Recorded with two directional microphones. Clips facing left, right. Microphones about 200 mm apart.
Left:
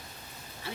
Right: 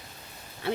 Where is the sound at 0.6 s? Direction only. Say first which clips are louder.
Right 11 dB; 60° right (ahead or behind).